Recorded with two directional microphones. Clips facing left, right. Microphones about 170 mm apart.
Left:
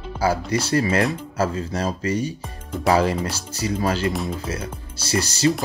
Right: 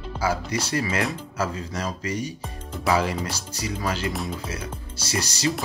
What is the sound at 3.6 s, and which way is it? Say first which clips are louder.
Speech: left 6 dB; 30° left (ahead or behind).